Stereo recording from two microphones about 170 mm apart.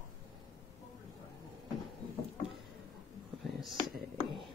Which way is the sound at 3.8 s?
Centre (ahead or behind).